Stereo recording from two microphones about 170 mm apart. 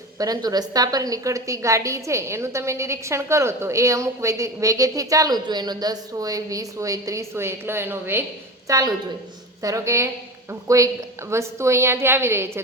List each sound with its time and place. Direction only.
0.2 s a woman's voice: 20° right (ahead or behind)